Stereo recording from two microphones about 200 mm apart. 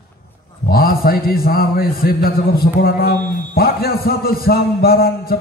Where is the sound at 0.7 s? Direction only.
50° left (ahead or behind).